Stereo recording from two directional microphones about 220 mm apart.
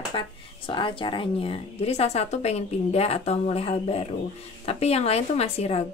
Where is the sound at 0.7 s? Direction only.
25° left (ahead or behind).